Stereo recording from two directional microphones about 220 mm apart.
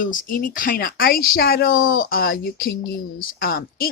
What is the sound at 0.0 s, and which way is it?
Speech, 40° left (ahead or behind).